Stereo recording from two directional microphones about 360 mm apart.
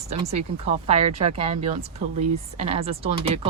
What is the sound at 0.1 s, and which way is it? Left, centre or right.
Speech, centre.